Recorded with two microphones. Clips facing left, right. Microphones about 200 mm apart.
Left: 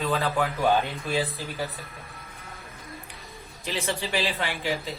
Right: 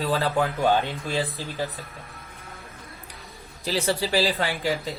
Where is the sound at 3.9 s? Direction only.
35° right (ahead or behind).